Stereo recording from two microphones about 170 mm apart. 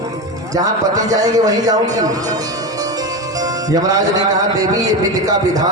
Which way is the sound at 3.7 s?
20° right (ahead or behind).